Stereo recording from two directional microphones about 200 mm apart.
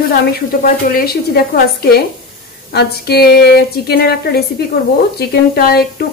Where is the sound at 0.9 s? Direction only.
50° left (ahead or behind).